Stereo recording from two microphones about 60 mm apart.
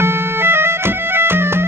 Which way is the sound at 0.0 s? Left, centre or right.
Right.